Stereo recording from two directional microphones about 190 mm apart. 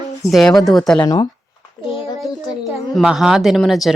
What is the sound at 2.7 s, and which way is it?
A woman's voice, centre (ahead or behind).